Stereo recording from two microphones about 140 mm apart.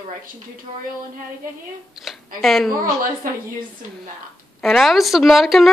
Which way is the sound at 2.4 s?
Centre (ahead or behind).